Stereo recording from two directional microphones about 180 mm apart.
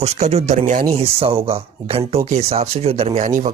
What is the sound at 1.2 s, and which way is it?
Speech, 30° right (ahead or behind).